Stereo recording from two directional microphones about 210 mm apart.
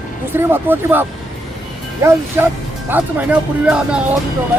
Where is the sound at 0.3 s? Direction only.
10° right (ahead or behind).